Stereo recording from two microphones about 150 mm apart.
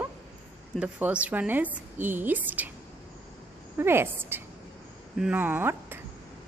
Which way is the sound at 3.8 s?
15° right (ahead or behind).